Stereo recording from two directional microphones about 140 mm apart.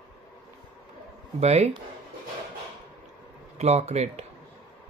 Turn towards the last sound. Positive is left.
turn(degrees=-50)  # may be behind; listen again after turning